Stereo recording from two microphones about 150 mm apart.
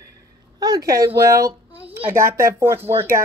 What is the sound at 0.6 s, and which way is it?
A child's voice, 25° right (ahead or behind).